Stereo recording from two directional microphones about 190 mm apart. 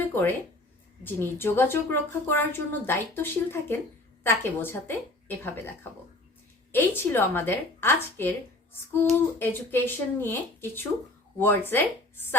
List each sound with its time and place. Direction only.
0.1 s a woman's voice: 10° left (ahead or behind)